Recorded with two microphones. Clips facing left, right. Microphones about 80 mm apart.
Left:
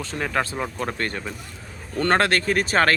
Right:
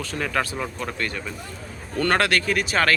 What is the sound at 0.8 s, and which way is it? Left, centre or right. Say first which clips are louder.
Speech: left 2 dB; left.